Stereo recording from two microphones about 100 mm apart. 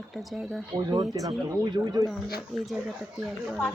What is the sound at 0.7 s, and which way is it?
Speech, 45° right (ahead or behind).